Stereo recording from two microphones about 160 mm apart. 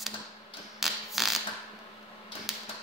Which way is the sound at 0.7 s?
Centre (ahead or behind).